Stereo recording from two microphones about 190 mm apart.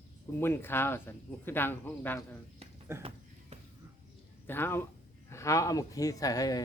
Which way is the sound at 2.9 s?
15° right (ahead or behind).